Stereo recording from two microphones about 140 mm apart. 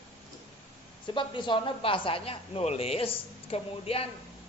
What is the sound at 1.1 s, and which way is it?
A woman's voice, 35° left (ahead or behind).